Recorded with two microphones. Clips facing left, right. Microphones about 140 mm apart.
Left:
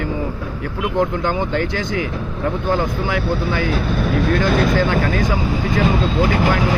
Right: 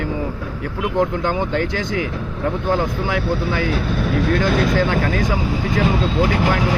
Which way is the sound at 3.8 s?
50° left (ahead or behind).